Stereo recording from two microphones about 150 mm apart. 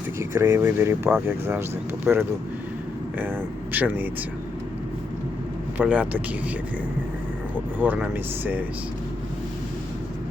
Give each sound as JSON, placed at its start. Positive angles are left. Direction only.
{"t": 0.2, "sound": "speech", "side_deg": -15}
{"t": 5.7, "sound": "speech", "side_deg": -10}
{"t": 7.8, "sound": "speech", "side_deg": -10}